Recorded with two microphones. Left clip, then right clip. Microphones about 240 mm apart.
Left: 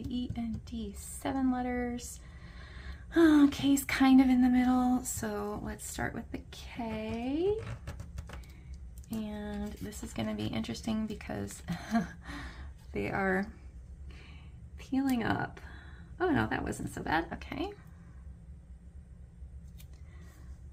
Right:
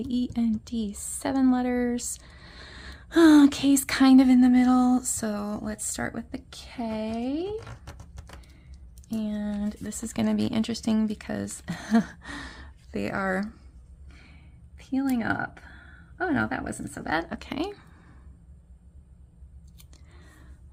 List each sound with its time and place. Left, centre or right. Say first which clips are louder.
0.1 s speech: right 10 dB; right
9.1 s speech: right 7 dB; right
14.1 s a sound: right 1 dB; right
15.1 s speech: right 4 dB; right